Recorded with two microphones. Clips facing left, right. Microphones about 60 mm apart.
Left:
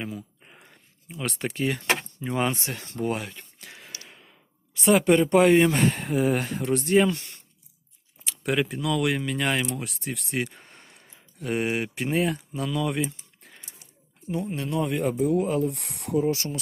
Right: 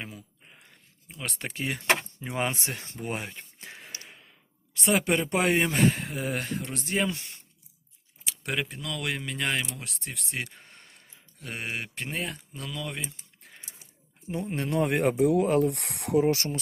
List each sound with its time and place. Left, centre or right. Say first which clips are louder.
0.4 s dog: left 3 dB; centre
1.0 s speech: left 6 dB; centre
3.1 s speech: left 3 dB; right
3.7 s a sound: even; centre
4.0 s speech: left 1 dB; centre
14.3 s speech: left 3 dB; right
14.5 s speech: right 3 dB; right